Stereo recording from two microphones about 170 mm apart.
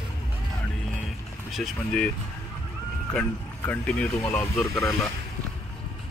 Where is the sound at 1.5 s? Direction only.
5° left (ahead or behind).